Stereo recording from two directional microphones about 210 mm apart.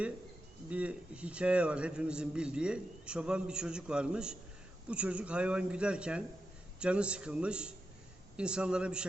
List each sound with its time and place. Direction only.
0.7 s a man's voice: 5° right (ahead or behind)